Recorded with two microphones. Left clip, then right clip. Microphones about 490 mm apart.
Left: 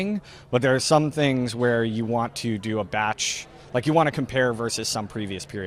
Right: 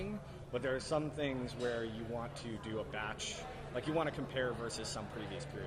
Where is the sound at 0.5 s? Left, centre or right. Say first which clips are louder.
Left 17 dB; left.